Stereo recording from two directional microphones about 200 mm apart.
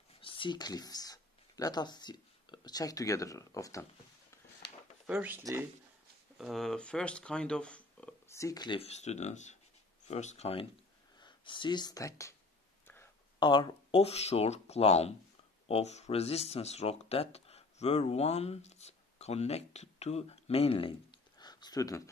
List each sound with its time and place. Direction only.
0.2 s speech: 25° left (ahead or behind)
5.0 s speech: 5° right (ahead or behind)
6.3 s speech: centre (ahead or behind); by 12.4 s 15° left (ahead or behind)
12.8 s a sound: 10° left (ahead or behind)
13.4 s speech: 25° left (ahead or behind)